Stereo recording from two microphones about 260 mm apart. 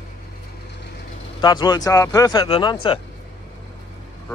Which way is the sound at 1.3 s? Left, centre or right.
Centre.